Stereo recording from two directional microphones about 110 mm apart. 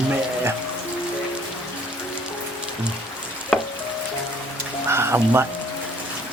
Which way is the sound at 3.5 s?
5° left (ahead or behind).